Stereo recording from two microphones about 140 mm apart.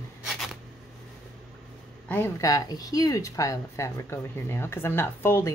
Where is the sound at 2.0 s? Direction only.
15° left (ahead or behind).